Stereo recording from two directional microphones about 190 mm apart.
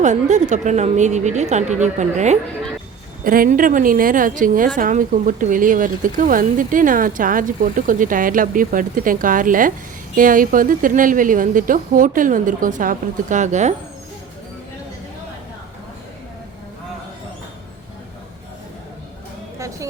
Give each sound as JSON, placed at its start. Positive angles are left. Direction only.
{"t": 0.0, "sound": "a woman's voice", "side_deg": -40}
{"t": 19.5, "sound": "music", "side_deg": -15}